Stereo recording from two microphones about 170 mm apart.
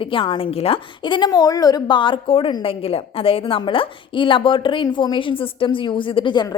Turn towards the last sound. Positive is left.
turn(degrees=25)  # may be behind; listen again after turning